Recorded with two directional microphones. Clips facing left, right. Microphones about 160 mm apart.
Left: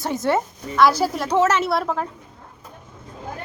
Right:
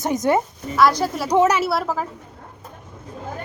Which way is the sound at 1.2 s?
15° right (ahead or behind).